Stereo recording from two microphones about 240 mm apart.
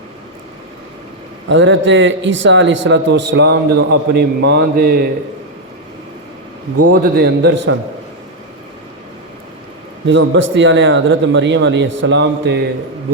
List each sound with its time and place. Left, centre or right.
1.5 s a man's voice: right
7.0 s a man's voice: right
10.1 s a man's voice: right